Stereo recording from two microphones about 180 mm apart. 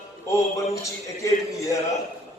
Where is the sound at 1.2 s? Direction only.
15° left (ahead or behind).